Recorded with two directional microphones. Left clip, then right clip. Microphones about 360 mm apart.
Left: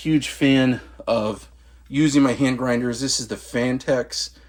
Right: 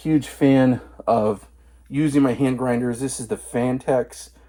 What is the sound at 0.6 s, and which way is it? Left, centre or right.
Speech, centre.